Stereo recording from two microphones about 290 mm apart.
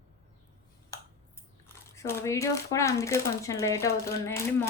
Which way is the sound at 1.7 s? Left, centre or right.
Centre.